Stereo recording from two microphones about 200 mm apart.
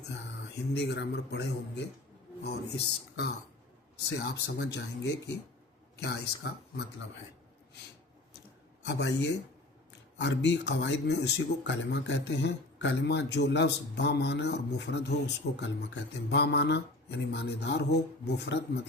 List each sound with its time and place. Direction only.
0.7 s speech: 60° left (ahead or behind)
8.9 s speech: 60° left (ahead or behind)